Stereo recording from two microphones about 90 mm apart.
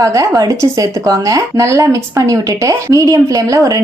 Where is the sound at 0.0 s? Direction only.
35° right (ahead or behind).